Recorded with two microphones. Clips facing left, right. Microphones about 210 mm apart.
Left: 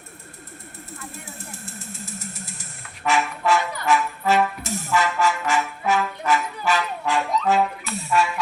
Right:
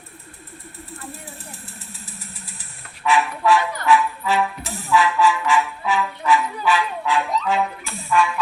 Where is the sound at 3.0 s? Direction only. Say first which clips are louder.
Right 3 dB; 45° left (ahead or behind).